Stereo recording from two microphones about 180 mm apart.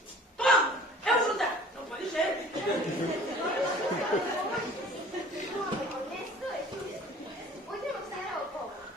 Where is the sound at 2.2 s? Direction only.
5° left (ahead or behind).